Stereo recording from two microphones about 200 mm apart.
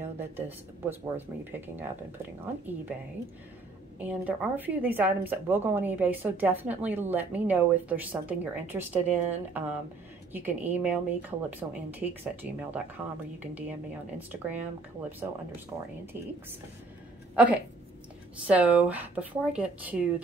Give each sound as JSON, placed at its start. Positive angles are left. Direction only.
{"t": 0.0, "sound": "a woman's voice", "side_deg": -10}
{"t": 4.0, "sound": "a woman's voice", "side_deg": -5}
{"t": 17.4, "sound": "a woman's voice", "side_deg": -5}